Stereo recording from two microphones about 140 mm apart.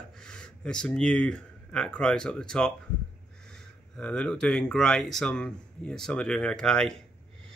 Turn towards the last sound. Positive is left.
turn(degrees=5)  # may be behind; listen again after turning